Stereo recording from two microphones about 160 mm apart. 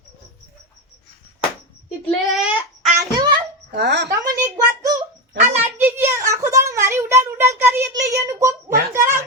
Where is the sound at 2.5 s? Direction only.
Centre (ahead or behind).